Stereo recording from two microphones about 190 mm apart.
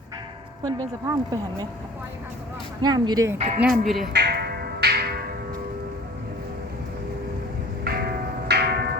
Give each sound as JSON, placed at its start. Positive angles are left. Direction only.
{"t": 0.6, "sound": "speech", "side_deg": -20}
{"t": 2.8, "sound": "speech", "side_deg": -20}
{"t": 3.3, "sound": "speech", "side_deg": -40}
{"t": 3.8, "sound": "speech", "side_deg": 0}
{"t": 4.1, "sound": "music", "side_deg": -55}
{"t": 7.9, "sound": "a sound", "side_deg": -50}
{"t": 8.4, "sound": "music", "side_deg": -60}